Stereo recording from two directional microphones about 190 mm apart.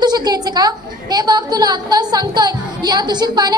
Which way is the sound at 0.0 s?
20° right (ahead or behind).